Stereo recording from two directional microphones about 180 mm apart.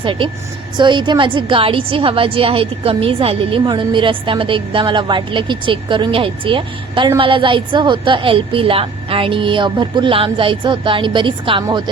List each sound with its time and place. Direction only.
0.0 s a woman's voice: 30° right (ahead or behind)